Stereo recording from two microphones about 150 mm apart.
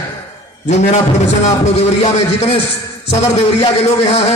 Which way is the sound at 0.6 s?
50° left (ahead or behind).